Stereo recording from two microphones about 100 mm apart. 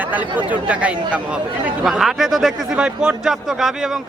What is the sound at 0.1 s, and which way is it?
A man's voice, 15° right (ahead or behind).